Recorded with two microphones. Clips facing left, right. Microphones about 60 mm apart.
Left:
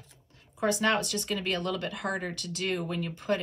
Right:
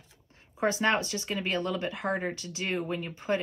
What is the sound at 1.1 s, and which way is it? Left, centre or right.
Speech, right.